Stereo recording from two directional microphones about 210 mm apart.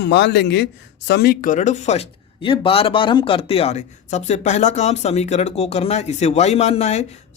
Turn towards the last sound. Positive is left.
turn(degrees=30)  # may be behind; listen again after turning